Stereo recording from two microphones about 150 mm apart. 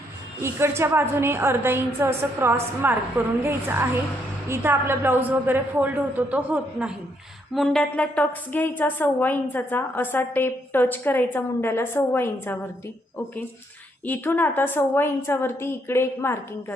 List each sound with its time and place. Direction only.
0.4 s a woman's voice: 15° right (ahead or behind); by 12.5 s 15° left (ahead or behind)
14.0 s a woman's voice: 10° left (ahead or behind)